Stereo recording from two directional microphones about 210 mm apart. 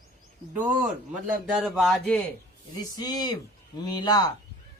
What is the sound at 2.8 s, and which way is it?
Speech, 20° left (ahead or behind).